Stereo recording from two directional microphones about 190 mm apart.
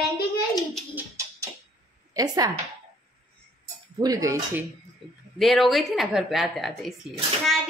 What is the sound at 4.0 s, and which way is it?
Speech, 20° right (ahead or behind).